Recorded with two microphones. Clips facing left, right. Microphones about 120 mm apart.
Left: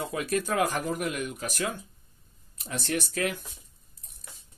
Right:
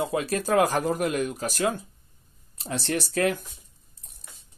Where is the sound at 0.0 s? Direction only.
30° right (ahead or behind).